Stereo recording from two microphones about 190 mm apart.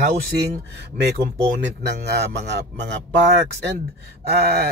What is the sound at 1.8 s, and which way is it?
A man's voice, 60° right (ahead or behind).